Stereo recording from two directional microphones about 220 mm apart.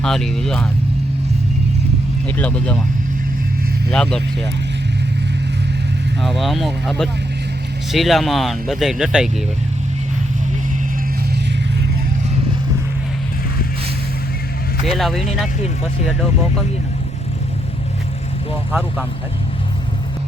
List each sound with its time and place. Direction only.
0.0 s speech: centre (ahead or behind)
2.4 s speech: 5° left (ahead or behind)
3.9 s speech: 5° left (ahead or behind)
6.2 s speech: centre (ahead or behind)
14.8 s speech: centre (ahead or behind)
18.7 s speech: 5° right (ahead or behind)